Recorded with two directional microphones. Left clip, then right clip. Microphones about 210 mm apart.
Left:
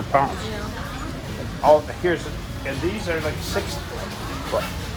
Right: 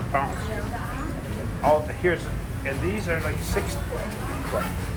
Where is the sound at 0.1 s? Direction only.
45° left (ahead or behind).